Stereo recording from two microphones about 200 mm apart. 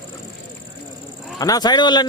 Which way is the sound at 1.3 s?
20° left (ahead or behind).